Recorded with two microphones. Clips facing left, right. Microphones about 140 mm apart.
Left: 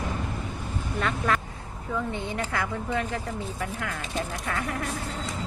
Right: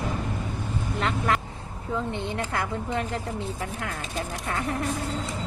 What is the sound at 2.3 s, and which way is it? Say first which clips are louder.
Speech: right 1 dB; 20° right (ahead or behind).